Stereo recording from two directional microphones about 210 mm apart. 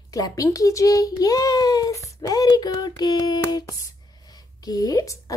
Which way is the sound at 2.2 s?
20° left (ahead or behind).